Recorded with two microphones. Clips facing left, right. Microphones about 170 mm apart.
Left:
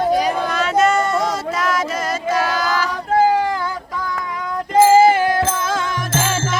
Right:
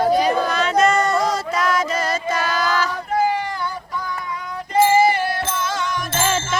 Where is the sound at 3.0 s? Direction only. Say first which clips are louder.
Left 8 dB; 90° left.